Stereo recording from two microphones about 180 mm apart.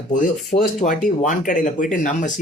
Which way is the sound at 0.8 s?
45° left (ahead or behind).